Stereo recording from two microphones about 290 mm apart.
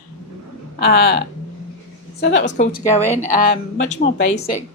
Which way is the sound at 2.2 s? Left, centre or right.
Left.